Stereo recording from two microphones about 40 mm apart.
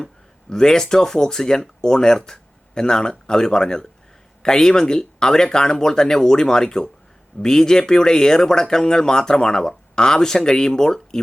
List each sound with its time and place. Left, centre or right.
0.5 s speech: centre